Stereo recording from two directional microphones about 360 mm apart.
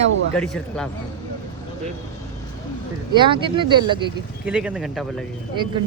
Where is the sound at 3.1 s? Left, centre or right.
Centre.